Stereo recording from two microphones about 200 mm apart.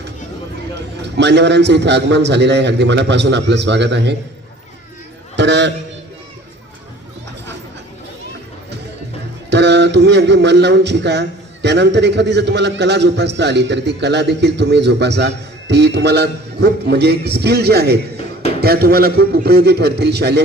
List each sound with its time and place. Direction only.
1.0 s speech: 60° right (ahead or behind)
5.4 s speech: 60° right (ahead or behind)
9.5 s a man's voice: 60° right (ahead or behind)